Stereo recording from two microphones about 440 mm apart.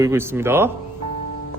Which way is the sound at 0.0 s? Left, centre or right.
Centre.